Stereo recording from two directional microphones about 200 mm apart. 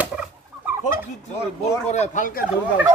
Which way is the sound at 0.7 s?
10° right (ahead or behind).